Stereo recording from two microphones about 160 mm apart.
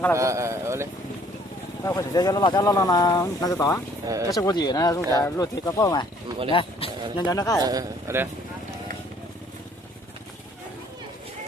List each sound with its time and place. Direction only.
0.2 s a man's voice: 20° right (ahead or behind)
1.8 s speech: 20° left (ahead or behind)
4.0 s speech: 20° right (ahead or behind)
4.3 s speech: 25° left (ahead or behind)
6.5 s speech: 35° left (ahead or behind)
7.3 s speech: 20° left (ahead or behind)
7.6 s a man's voice: 25° right (ahead or behind)